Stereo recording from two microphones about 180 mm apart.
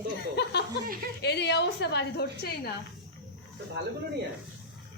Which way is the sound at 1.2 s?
70° left (ahead or behind).